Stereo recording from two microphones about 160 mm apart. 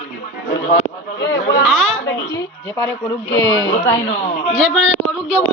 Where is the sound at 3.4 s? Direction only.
20° left (ahead or behind).